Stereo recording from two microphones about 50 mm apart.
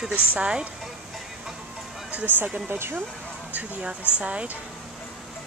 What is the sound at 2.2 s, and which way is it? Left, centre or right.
Speech, right.